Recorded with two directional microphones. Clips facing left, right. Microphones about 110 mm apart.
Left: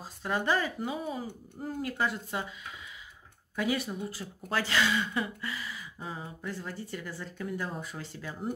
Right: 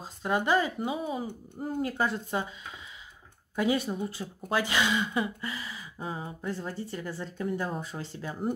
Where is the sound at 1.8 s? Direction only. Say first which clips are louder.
Even; 30° right (ahead or behind).